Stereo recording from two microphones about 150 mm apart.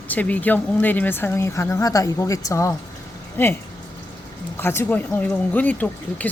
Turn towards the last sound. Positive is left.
turn(degrees=10)  # may be behind; listen again after turning